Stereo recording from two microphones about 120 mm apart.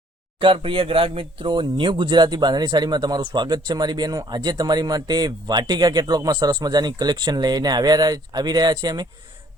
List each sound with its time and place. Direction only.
0.3 s speech: 45° right (ahead or behind)